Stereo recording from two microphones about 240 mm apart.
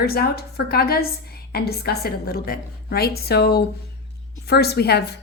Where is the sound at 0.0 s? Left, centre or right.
Left.